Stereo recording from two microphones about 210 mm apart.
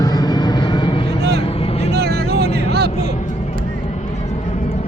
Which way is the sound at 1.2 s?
50° right (ahead or behind).